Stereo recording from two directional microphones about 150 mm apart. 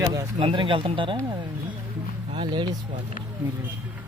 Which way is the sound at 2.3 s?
30° right (ahead or behind).